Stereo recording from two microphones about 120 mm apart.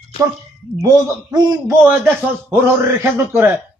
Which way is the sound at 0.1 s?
50° left (ahead or behind).